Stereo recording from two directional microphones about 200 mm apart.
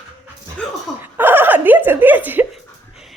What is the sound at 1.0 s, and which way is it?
Giggle, 10° right (ahead or behind).